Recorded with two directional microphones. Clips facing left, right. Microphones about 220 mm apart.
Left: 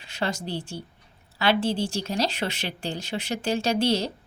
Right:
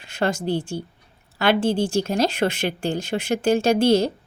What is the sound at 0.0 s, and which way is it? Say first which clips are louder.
Speech: right 6 dB; 50° right (ahead or behind).